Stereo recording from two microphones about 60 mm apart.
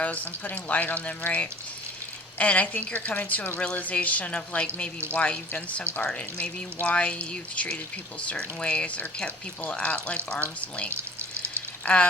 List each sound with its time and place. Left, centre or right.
0.0 s a woman's voice: left
6.8 s a woman's voice: left
10.9 s a sound: right
11.9 s a woman's voice: left